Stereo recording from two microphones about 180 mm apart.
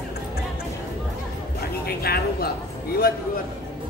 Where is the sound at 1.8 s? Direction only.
60° left (ahead or behind).